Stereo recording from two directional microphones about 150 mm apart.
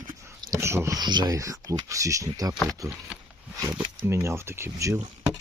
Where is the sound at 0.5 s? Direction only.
15° right (ahead or behind).